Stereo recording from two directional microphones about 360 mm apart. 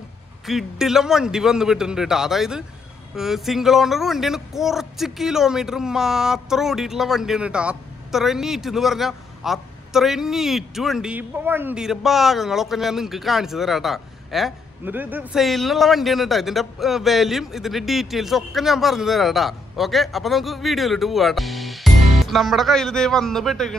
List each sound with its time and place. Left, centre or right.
0.5 s speech: centre